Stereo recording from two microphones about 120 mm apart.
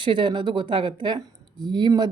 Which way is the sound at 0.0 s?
40° right (ahead or behind).